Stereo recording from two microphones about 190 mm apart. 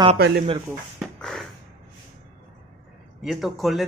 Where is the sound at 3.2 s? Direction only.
Centre (ahead or behind).